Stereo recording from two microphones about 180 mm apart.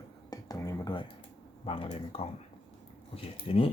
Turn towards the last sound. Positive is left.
turn(degrees=30)  # may be behind; listen again after turning